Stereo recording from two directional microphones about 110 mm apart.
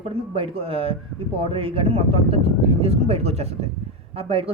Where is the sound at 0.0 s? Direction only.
60° right (ahead or behind).